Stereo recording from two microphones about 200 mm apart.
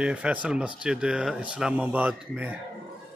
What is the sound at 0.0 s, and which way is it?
A man's voice, 5° right (ahead or behind).